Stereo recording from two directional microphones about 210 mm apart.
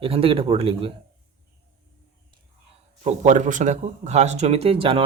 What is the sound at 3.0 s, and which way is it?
A man's voice, 35° right (ahead or behind).